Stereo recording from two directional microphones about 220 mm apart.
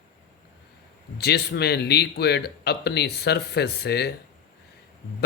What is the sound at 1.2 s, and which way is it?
Speech, 50° left (ahead or behind).